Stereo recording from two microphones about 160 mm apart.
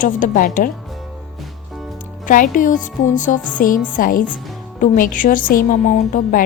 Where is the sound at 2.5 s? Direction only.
55° left (ahead or behind).